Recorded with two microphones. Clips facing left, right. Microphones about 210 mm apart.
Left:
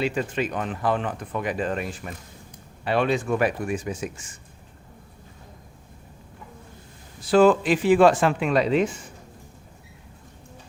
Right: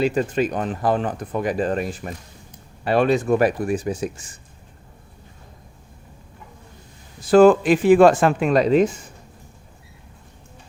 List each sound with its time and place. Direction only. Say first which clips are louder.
0.0 s speech: right 5 dB; 40° right (ahead or behind)
7.3 s speech: right 5 dB; 50° right (ahead or behind)